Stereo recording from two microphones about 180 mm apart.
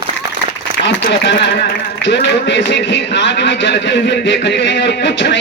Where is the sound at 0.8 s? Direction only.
80° left.